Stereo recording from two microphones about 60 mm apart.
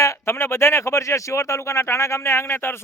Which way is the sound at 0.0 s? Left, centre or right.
Left.